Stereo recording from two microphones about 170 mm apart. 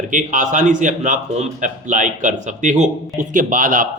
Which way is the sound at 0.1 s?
50° right (ahead or behind).